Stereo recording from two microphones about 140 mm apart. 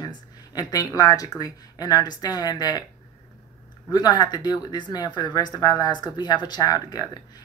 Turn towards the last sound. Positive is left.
turn(degrees=30)  # may be behind; listen again after turning